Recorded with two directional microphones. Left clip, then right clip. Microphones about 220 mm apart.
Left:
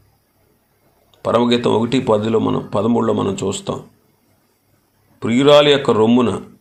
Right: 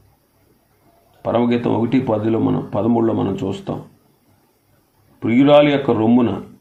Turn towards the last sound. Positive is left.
turn(degrees=35)  # may be behind; listen again after turning